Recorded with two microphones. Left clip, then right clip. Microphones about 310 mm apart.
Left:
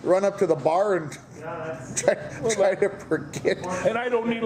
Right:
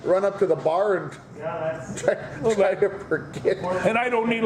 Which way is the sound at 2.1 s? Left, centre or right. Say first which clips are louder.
Right 1 dB; left.